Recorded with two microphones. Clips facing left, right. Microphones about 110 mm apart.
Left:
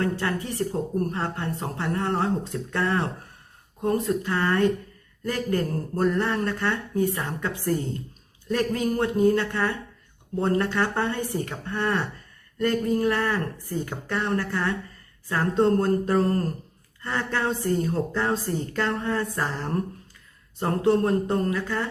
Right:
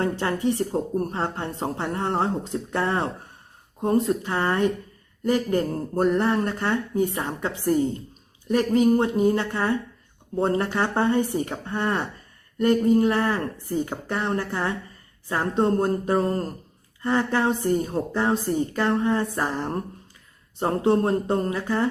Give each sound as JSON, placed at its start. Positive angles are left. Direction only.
{"t": 0.0, "sound": "a woman's voice", "side_deg": -25}